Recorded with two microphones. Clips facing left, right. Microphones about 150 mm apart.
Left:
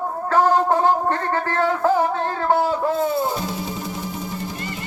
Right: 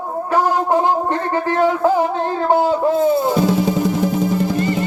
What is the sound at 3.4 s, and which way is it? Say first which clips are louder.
Music: right 12 dB; 90° right.